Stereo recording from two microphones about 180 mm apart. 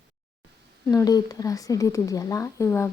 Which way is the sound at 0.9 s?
20° left (ahead or behind).